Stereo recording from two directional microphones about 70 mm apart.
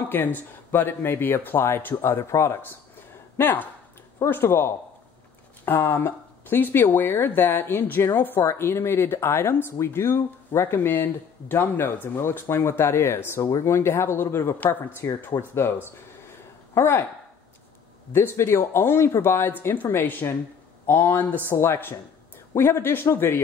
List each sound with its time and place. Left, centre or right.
0.1 s speech: left
5.9 s speech: left
13.4 s speech: left
13.7 s speech: left
16.7 s speech: left
18.1 s speech: left